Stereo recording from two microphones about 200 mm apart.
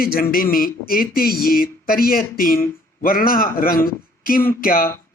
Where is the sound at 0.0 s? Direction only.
45° left (ahead or behind).